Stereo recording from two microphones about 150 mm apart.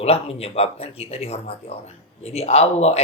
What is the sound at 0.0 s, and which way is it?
Speech, 40° left (ahead or behind).